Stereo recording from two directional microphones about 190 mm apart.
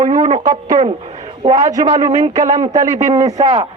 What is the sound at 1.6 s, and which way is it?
Speech, 40° right (ahead or behind).